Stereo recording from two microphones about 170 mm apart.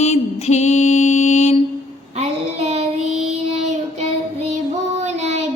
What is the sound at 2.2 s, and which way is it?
Child singing, 40° right (ahead or behind).